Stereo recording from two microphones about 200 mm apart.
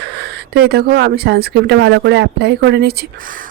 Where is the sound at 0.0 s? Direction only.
55° right (ahead or behind).